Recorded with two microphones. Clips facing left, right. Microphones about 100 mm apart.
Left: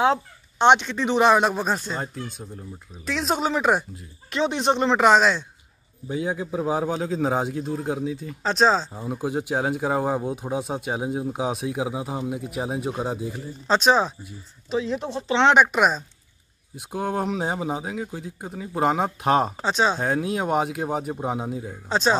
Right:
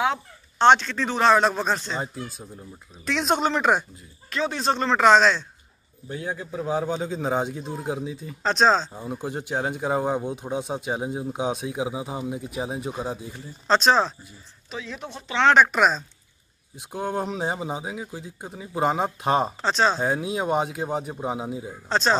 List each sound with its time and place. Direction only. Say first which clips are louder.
0.6 s speech: even; 15° left (ahead or behind)
2.3 s speech: left 3 dB; 5° right (ahead or behind)
4.3 s speech: left 3 dB; 20° left (ahead or behind)
14.7 s speech: left 9 dB; 25° left (ahead or behind)
15.5 s speech: even; 10° left (ahead or behind)
21.8 s speech: left 1 dB; 10° left (ahead or behind)